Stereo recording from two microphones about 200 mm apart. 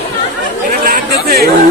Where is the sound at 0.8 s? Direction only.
50° right (ahead or behind).